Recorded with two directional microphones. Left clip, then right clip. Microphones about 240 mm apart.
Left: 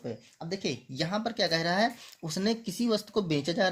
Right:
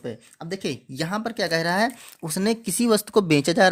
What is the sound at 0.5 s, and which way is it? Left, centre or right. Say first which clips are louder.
Speech: right 4 dB; right.